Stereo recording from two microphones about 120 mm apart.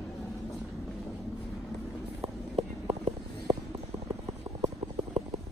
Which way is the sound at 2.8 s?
35° right (ahead or behind).